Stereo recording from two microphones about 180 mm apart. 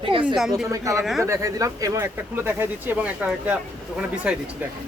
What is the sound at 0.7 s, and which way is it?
Speech, 15° right (ahead or behind).